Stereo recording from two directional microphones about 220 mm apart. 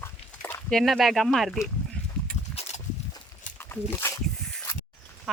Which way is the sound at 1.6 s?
5° left (ahead or behind).